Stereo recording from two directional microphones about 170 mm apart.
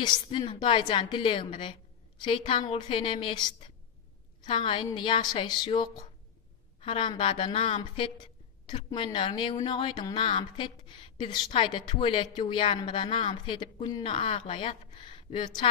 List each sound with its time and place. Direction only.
0.0 s a woman's voice: 30° left (ahead or behind)
14.0 s a woman's voice: 35° left (ahead or behind)